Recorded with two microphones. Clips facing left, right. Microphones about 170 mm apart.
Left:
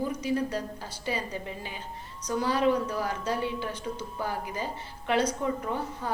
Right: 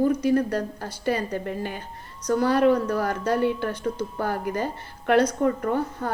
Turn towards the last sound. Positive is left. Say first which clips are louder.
# right 7 dB
turn(degrees=-55)  # may be behind; listen again after turning